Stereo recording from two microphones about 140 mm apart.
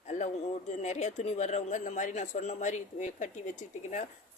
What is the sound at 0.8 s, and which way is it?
Speech, 55° left (ahead or behind).